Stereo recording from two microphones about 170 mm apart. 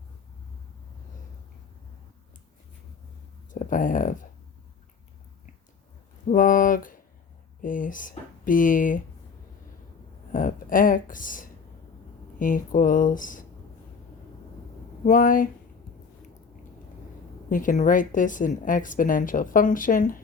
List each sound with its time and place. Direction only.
3.5 s speech: 50° left (ahead or behind)
6.2 s speech: 50° left (ahead or behind)
10.3 s speech: 55° left (ahead or behind)
15.0 s speech: 55° left (ahead or behind)
17.5 s speech: 50° left (ahead or behind)